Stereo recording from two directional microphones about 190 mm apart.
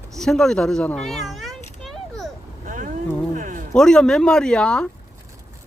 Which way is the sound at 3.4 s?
45° right (ahead or behind).